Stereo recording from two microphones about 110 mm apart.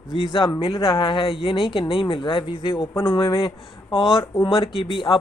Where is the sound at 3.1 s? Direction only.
55° left (ahead or behind).